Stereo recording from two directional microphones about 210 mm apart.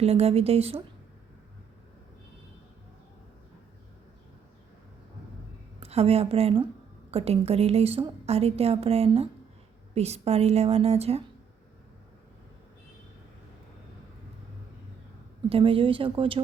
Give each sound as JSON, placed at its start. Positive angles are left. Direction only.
{"t": 0.0, "sound": "a woman's voice", "side_deg": -30}
{"t": 5.8, "sound": "a woman's voice", "side_deg": -30}
{"t": 15.4, "sound": "a woman's voice", "side_deg": -25}